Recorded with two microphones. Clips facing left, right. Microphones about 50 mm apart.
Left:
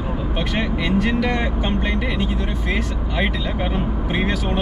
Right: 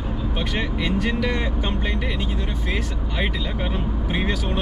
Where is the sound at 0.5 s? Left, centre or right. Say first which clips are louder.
Left 4 dB; centre.